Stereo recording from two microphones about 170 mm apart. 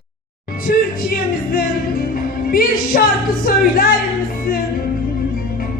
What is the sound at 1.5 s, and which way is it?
Music, 60° left (ahead or behind).